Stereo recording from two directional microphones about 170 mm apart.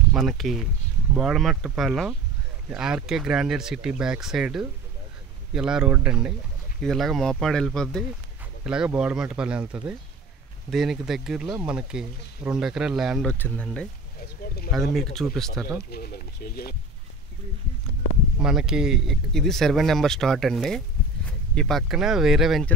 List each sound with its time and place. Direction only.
0.1 s speech: centre (ahead or behind)
14.4 s speech: 60° left (ahead or behind)
15.1 s speech: centre (ahead or behind)
15.9 s speech: 65° left (ahead or behind)
18.4 s speech: 5° right (ahead or behind)